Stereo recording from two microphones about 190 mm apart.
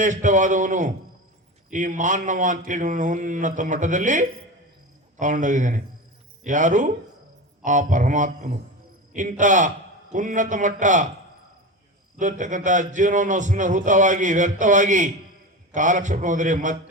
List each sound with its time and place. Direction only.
0.0 s speech: 40° right (ahead or behind)
12.2 s speech: 40° right (ahead or behind)